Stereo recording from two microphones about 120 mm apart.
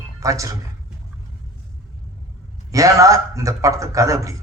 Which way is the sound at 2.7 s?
25° right (ahead or behind).